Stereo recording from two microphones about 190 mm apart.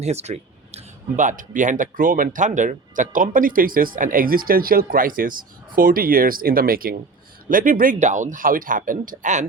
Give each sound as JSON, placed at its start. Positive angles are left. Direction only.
{"t": 0.0, "sound": "speech", "side_deg": -35}